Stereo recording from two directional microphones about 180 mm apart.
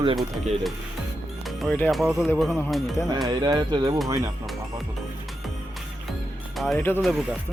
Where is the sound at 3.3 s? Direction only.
25° right (ahead or behind).